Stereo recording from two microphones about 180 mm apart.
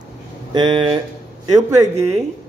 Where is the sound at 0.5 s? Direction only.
25° right (ahead or behind).